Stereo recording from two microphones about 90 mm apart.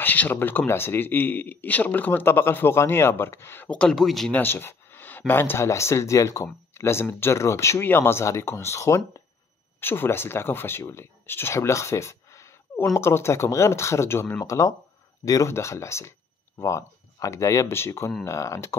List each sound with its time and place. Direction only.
0.0 s speech: 20° left (ahead or behind)
3.9 s speech: centre (ahead or behind)
4.3 s speech: 25° left (ahead or behind)